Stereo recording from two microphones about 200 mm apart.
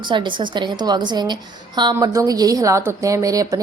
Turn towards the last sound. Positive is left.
turn(degrees=-15)  # may be behind; listen again after turning